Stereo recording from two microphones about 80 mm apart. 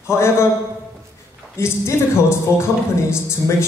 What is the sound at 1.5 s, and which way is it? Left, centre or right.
Music, left.